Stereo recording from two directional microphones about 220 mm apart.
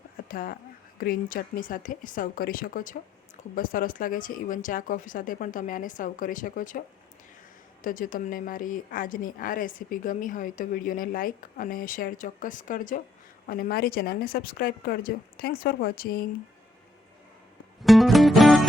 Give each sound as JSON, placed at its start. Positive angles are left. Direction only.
{"t": 0.3, "sound": "speech", "side_deg": 40}
{"t": 17.8, "sound": "music", "side_deg": 0}